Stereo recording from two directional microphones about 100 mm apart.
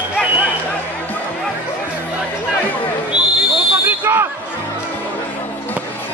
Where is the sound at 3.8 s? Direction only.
25° right (ahead or behind).